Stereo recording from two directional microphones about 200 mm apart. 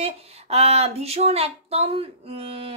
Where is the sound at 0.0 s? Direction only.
30° right (ahead or behind).